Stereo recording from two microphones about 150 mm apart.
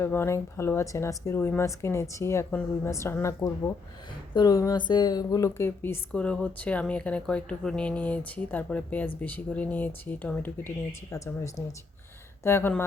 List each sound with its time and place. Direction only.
0.0 s speech: 15° left (ahead or behind)